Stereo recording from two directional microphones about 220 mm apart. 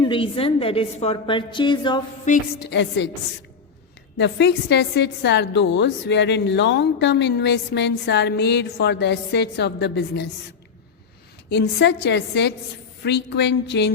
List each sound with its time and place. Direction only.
0.0 s a woman's voice: 25° left (ahead or behind)
2.2 s a woman's voice: 35° left (ahead or behind)
2.6 s a woman's voice: 50° left (ahead or behind)
4.2 s a woman's voice: 50° left (ahead or behind)
11.4 s a woman's voice: 50° left (ahead or behind)